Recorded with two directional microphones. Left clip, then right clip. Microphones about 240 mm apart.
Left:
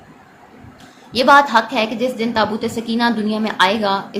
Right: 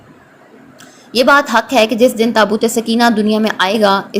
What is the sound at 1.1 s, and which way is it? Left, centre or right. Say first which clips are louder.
A woman's voice: right 1 dB; centre.